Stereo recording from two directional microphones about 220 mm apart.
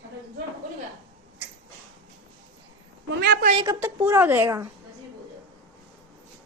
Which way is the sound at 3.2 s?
50° right (ahead or behind).